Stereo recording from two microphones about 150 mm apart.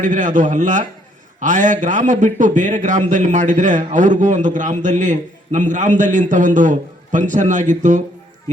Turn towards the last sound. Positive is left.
turn(degrees=-55)  # may be behind; listen again after turning